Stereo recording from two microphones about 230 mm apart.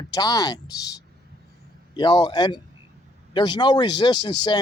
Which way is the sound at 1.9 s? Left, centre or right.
Centre.